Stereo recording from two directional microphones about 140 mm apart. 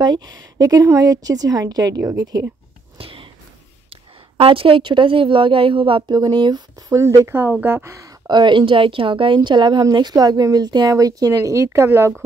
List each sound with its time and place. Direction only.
0.0 s speech: 30° right (ahead or behind)
3.0 s a sound: 40° right (ahead or behind)
3.9 s a woman's voice: 40° right (ahead or behind)
6.9 s speech: 20° right (ahead or behind)